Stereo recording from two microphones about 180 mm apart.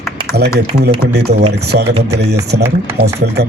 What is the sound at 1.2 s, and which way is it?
A man's voice, 65° right (ahead or behind).